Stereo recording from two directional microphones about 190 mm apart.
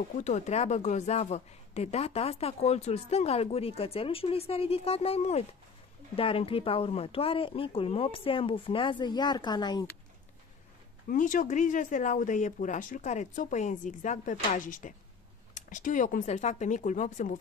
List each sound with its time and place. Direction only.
0.2 s speech: 40° left (ahead or behind); by 9.8 s 20° left (ahead or behind)
11.1 s speech: 45° left (ahead or behind)